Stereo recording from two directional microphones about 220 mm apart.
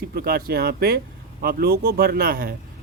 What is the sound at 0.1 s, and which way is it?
Speech, 45° right (ahead or behind).